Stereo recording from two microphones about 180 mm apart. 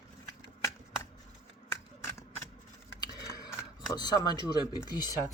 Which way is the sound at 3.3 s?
20° left (ahead or behind).